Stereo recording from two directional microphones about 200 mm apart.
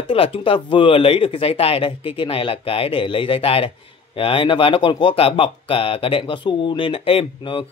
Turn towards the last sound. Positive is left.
turn(degrees=25)  # may be behind; listen again after turning